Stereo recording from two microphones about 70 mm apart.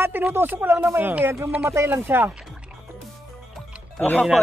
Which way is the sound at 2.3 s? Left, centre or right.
Centre.